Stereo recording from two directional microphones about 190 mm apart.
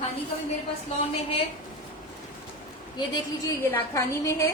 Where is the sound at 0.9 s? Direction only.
35° left (ahead or behind).